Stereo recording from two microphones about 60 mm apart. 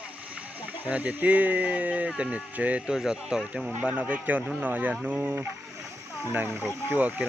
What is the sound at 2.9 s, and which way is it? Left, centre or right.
Speech, centre.